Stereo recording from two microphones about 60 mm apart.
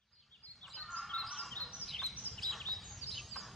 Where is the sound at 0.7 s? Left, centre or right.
Centre.